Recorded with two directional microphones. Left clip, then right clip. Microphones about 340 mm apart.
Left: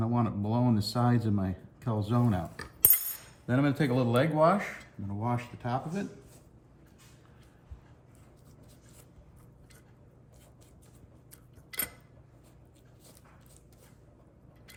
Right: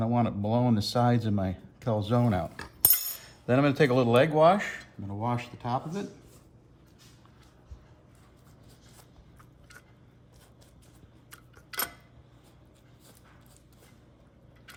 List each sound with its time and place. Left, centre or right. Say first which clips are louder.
0.0 s speech: right 4 dB; centre
3.4 s speech: right 6 dB; centre